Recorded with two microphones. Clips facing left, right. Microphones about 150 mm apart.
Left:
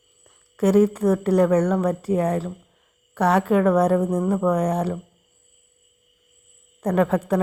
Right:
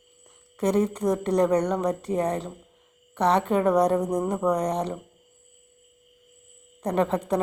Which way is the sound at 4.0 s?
15° right (ahead or behind).